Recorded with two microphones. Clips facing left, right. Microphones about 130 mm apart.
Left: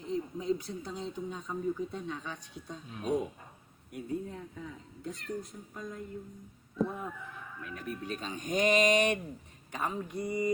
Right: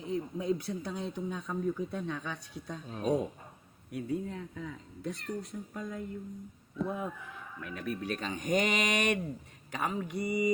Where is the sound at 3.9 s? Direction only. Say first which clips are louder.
Right 2 dB; 85° right.